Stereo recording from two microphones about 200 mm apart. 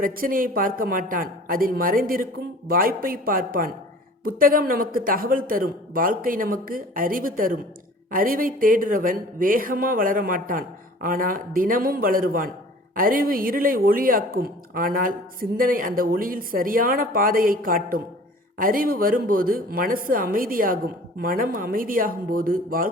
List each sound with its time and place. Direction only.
0.0 s speech: 45° right (ahead or behind)